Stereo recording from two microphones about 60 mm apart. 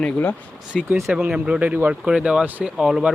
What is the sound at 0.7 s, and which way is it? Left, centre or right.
Speech, centre.